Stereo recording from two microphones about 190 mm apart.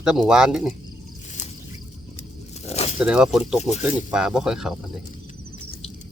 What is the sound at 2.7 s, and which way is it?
Zipper, 35° left (ahead or behind).